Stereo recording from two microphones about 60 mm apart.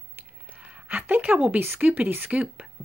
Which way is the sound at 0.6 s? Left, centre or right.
Right.